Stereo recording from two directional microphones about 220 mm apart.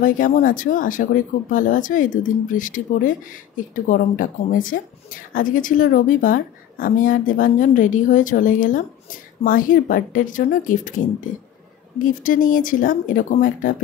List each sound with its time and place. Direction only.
0.0 s speech: 40° left (ahead or behind)